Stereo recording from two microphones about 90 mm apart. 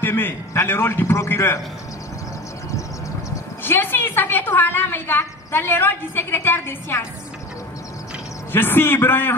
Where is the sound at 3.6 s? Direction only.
20° left (ahead or behind).